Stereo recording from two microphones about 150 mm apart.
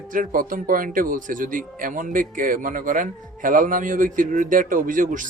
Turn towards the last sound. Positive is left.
turn(degrees=-60)  # may be behind; listen again after turning